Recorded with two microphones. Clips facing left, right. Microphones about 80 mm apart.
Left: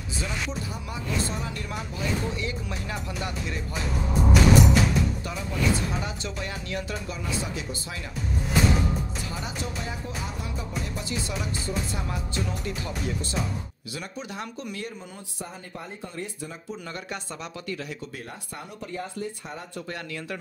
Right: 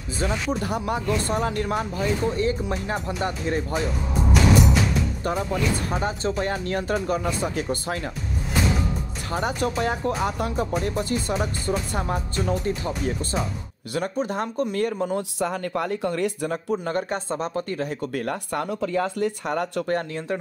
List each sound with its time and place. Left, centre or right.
0.2 s speech: right
5.2 s speech: right
9.3 s speech: right
16.8 s speech: right
18.1 s speech: right
19.9 s speech: right